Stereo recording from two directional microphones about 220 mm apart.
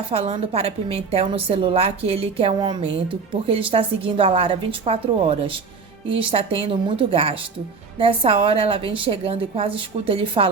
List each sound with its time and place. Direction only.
0.1 s a woman's voice: 25° right (ahead or behind)